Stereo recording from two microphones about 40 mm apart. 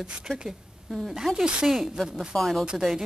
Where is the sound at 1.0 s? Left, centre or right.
Centre.